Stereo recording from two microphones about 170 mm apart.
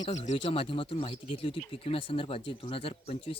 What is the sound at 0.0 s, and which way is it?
Speech, 45° left (ahead or behind).